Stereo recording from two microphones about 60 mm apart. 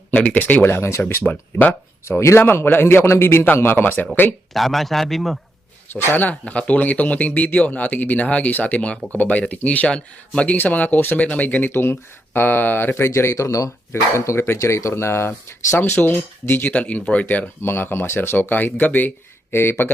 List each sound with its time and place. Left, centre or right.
0.1 s speech: left
0.7 s speech: left
1.2 s speech: left
2.4 s speech: left
4.5 s a man's voice: centre
5.9 s speech: left
6.2 s speech: left
11.7 s speech: left
13.1 s speech: left
13.9 s speech: left
17.6 s speech: left